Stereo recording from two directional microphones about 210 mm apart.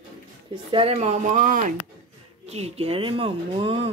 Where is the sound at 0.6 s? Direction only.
25° right (ahead or behind).